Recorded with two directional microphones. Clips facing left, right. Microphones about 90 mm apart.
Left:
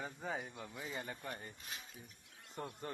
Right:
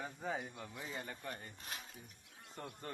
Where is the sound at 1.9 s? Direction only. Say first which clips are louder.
Even; centre (ahead or behind).